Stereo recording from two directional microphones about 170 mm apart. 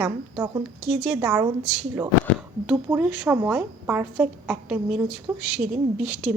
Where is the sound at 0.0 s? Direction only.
15° right (ahead or behind).